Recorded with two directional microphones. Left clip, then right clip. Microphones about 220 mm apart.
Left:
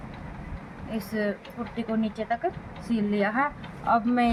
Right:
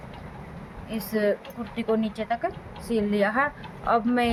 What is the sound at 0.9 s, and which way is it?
Speech, 35° right (ahead or behind).